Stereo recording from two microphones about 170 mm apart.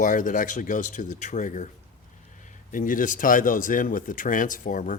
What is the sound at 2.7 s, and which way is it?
Speech, 50° left (ahead or behind).